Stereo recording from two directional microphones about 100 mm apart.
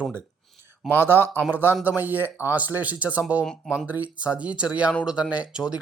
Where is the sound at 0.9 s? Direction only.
25° right (ahead or behind).